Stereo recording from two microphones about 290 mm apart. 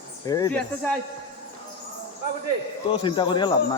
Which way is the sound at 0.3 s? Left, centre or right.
Centre.